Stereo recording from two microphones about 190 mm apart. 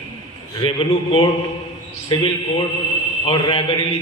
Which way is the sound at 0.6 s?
30° left (ahead or behind).